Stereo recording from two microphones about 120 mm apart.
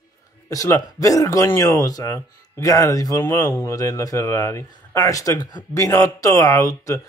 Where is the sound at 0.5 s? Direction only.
30° left (ahead or behind).